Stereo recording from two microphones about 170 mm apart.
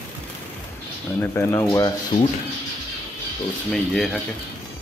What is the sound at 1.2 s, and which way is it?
Speech, 15° left (ahead or behind).